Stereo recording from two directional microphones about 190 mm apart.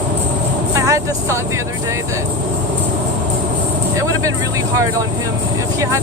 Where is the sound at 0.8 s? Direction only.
15° right (ahead or behind).